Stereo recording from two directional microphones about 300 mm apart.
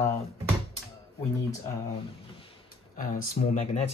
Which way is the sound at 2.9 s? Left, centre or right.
Left.